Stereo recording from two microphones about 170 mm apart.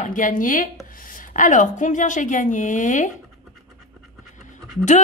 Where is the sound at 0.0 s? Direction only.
50° left (ahead or behind).